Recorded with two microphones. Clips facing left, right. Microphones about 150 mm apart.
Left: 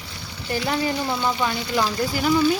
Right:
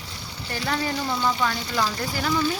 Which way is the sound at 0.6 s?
15° left (ahead or behind).